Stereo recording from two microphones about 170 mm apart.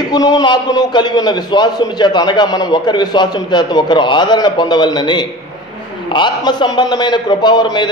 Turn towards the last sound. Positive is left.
turn(degrees=25)  # may be behind; listen again after turning